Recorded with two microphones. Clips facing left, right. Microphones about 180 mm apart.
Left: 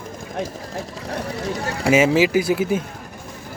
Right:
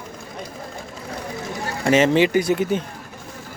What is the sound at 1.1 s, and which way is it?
Chatter, 70° left (ahead or behind).